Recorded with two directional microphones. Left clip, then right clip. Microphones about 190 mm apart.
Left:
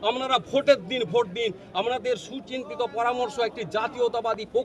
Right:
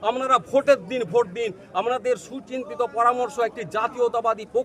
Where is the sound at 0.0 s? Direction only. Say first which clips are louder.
Right 3 dB; 20° right (ahead or behind).